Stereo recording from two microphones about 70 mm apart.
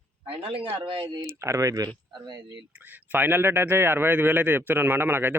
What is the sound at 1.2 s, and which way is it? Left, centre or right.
Speech, right.